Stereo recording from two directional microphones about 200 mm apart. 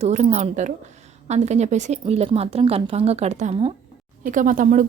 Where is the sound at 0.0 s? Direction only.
35° right (ahead or behind).